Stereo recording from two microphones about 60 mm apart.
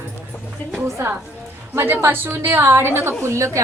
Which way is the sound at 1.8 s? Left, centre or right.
Right.